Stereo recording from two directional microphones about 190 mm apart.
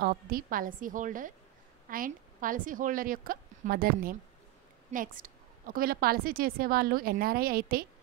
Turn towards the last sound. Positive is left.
turn(degrees=-50)  # may be behind; listen again after turning